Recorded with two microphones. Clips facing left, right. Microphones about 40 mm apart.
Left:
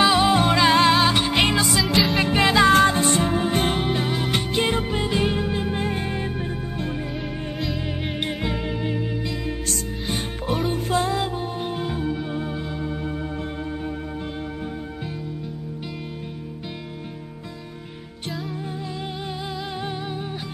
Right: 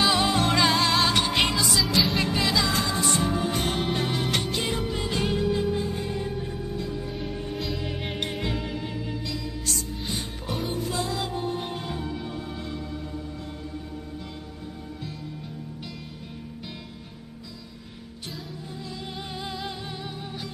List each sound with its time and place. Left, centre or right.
0.0 s music: centre
0.7 s music: left
0.9 s music: centre
1.5 s music: left
3.9 s music: centre
4.6 s music: left
5.0 s music: left
5.8 s music: left
7.5 s music: centre; by 9.4 s left
9.7 s music: left
11.3 s music: left
19.4 s music: centre